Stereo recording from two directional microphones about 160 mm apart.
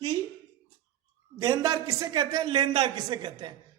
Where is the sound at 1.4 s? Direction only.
20° right (ahead or behind).